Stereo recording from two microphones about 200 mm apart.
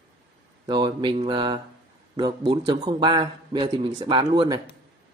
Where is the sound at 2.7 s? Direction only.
20° right (ahead or behind).